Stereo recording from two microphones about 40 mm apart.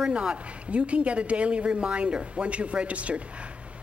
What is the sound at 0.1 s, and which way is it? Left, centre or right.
A woman's voice, right.